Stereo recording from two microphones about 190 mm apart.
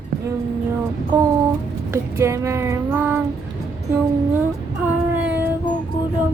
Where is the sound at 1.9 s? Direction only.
15° right (ahead or behind).